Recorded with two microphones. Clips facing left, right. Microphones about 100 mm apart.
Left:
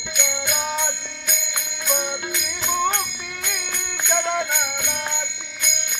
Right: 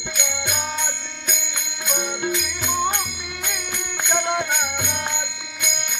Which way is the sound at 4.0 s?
15° right (ahead or behind).